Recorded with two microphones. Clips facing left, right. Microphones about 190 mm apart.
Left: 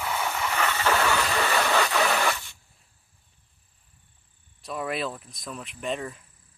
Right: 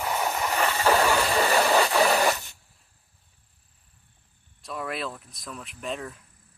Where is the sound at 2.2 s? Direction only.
40° right (ahead or behind).